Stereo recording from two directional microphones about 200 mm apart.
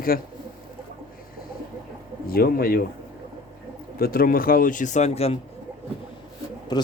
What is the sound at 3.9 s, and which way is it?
Speech, 45° left (ahead or behind).